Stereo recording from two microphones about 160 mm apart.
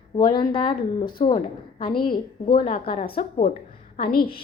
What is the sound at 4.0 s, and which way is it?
Speech, 70° left (ahead or behind).